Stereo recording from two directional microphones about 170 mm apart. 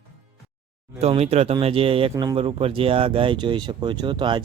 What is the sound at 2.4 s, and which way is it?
Speech, 35° right (ahead or behind).